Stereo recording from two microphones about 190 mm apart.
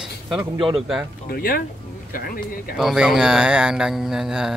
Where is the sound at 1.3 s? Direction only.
50° left (ahead or behind).